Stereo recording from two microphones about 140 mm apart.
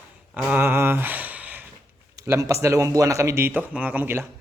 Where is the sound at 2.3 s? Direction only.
20° right (ahead or behind).